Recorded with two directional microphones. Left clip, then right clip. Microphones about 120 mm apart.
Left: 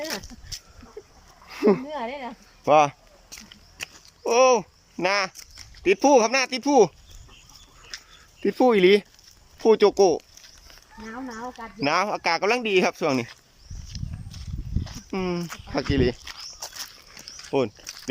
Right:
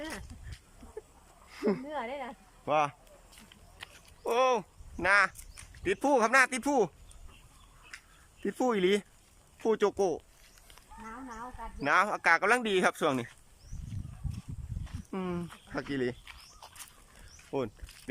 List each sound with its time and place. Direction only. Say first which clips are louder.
1.5 s a sound: left 11 dB; 30° left (ahead or behind)
1.9 s speech: left 6 dB; 10° left (ahead or behind)
2.6 s speech: left 11 dB; 30° left (ahead or behind)
4.2 s speech: left 9 dB; 20° left (ahead or behind)
7.9 s a sound: left 9 dB; 50° left (ahead or behind)
8.4 s speech: left 11 dB; 20° left (ahead or behind)
11.8 s speech: left 4 dB; 20° left (ahead or behind)
15.1 s speech: left 9 dB; 15° left (ahead or behind)
17.5 s speech: left 10 dB; 20° left (ahead or behind)